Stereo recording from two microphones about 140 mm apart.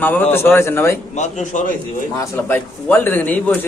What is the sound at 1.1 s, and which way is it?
Speech, 60° left (ahead or behind).